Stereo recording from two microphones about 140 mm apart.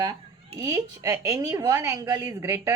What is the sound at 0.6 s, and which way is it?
A woman's voice, 20° right (ahead or behind).